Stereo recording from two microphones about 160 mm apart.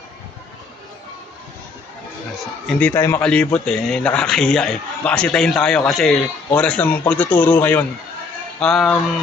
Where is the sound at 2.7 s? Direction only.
10° left (ahead or behind).